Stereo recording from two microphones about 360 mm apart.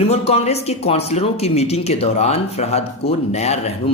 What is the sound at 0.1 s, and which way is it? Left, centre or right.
Speech, centre.